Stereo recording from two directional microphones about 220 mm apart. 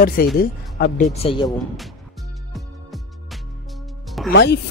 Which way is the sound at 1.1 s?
25° left (ahead or behind).